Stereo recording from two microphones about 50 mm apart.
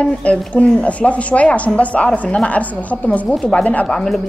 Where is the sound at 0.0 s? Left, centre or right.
Left.